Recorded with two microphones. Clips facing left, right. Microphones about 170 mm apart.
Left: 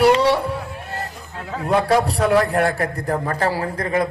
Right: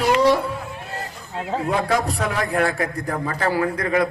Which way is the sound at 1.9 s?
30° left (ahead or behind).